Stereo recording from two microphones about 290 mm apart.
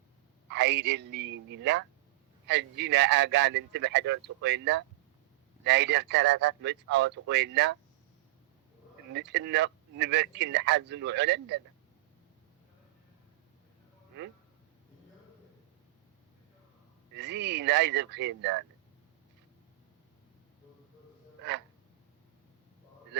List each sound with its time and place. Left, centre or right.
0.5 s speech: right
9.1 s speech: right
17.2 s speech: right